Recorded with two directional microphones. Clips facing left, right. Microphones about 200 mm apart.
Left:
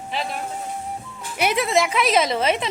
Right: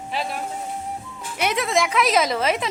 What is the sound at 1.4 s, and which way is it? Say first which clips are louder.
A woman's voice: left 2 dB; 5° left (ahead or behind).